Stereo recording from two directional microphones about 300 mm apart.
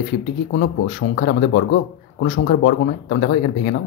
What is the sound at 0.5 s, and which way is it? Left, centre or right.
Speech, left.